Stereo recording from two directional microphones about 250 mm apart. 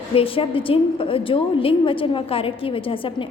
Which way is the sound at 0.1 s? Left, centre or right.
Left.